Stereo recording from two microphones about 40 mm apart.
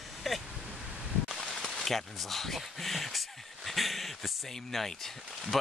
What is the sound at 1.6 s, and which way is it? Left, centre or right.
Speech, centre.